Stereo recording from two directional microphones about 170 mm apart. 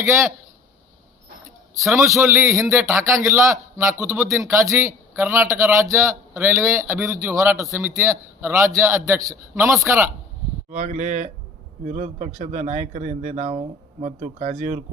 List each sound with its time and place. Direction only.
0.0 s a man's voice: 15° right (ahead or behind)
2.2 s a man's voice: 15° right (ahead or behind)
10.7 s speech: 45° right (ahead or behind)